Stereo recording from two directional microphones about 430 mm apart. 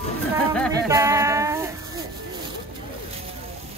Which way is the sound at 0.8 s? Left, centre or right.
Centre.